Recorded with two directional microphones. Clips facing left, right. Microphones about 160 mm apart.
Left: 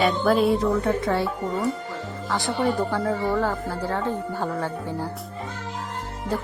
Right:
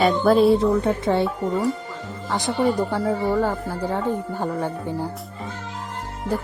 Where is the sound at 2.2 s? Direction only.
15° right (ahead or behind).